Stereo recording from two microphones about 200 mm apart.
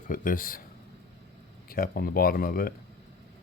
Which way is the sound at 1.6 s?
45° left (ahead or behind).